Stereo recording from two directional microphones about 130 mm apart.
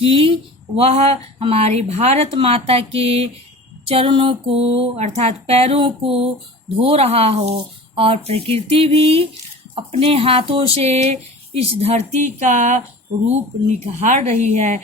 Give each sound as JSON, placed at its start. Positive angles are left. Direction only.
{"t": 0.0, "sound": "a woman's voice", "side_deg": -45}
{"t": 13.2, "sound": "a woman's voice", "side_deg": -60}